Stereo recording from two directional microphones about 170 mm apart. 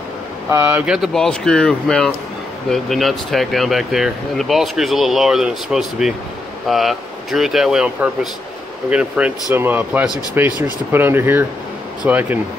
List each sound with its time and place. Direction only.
0.5 s speech: 15° right (ahead or behind)
0.8 s speech: centre (ahead or behind)